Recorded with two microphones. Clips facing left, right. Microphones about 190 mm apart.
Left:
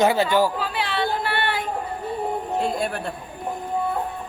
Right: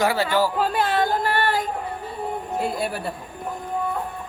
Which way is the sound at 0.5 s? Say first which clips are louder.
Right 4 dB; 45° right (ahead or behind).